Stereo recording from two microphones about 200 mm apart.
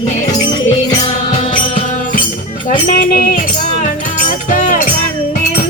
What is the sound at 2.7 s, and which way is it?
Music, 45° left (ahead or behind).